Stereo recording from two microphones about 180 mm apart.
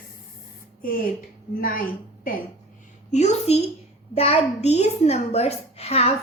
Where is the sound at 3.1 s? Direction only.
40° left (ahead or behind).